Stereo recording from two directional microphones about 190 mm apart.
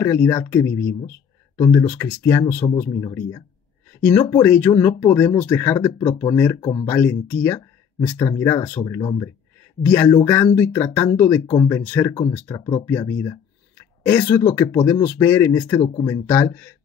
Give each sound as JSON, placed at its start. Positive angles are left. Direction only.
{"t": 0.0, "sound": "speech", "side_deg": 15}
{"t": 15.8, "sound": "speech", "side_deg": 25}
{"t": 16.1, "sound": "speech", "side_deg": 10}